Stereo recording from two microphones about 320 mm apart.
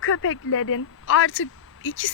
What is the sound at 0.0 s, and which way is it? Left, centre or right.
Speech, left.